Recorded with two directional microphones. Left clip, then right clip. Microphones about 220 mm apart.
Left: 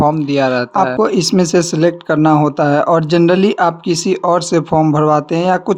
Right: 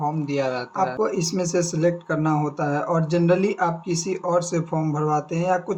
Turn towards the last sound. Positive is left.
turn(degrees=45)  # may be behind; listen again after turning